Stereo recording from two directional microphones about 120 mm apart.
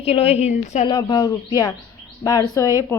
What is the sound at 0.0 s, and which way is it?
Speech, 55° left (ahead or behind).